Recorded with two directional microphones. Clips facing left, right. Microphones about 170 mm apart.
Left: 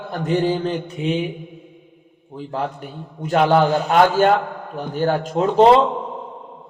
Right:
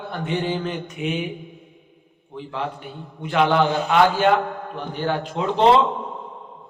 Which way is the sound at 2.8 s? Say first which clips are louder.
Left 3 dB; 45° left (ahead or behind).